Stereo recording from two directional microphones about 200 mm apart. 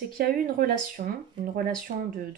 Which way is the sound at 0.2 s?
45° right (ahead or behind).